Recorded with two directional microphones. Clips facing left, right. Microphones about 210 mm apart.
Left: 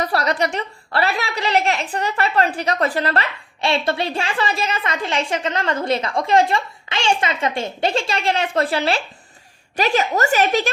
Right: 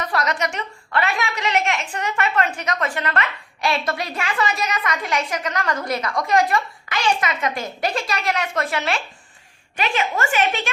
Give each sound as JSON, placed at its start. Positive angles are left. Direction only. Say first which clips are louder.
{"t": 0.0, "sound": "a woman's voice", "louder": "left 3 dB", "side_deg": 35}